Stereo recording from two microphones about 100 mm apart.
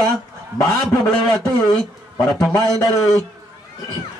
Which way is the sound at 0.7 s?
5° left (ahead or behind).